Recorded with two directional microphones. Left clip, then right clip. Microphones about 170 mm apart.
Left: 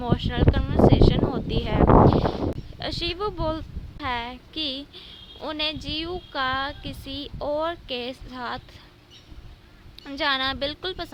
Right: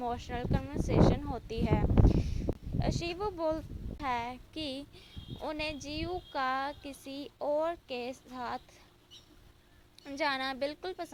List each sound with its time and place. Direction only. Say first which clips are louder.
0.0 s speech: left 10 dB; 15° right (ahead or behind)
10.2 s speech: left 8 dB; 15° right (ahead or behind)